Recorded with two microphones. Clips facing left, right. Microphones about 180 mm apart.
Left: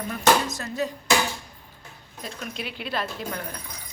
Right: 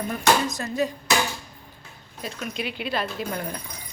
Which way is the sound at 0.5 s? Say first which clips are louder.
Right 3 dB; 15° right (ahead or behind).